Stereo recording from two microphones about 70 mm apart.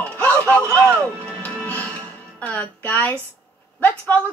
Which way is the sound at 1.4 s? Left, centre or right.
Left.